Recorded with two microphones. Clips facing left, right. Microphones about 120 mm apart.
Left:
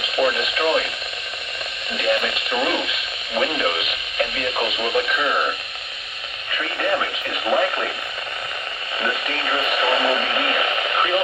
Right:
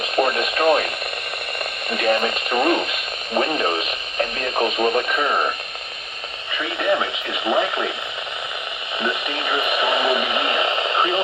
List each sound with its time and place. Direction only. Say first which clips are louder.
0.0 s radio: right 1 dB; 50° right (ahead or behind)
1.9 s speech: right 2 dB; 50° right (ahead or behind)
6.7 s speech: right 2 dB; 15° right (ahead or behind)
9.0 s speech: right 1 dB; 20° right (ahead or behind)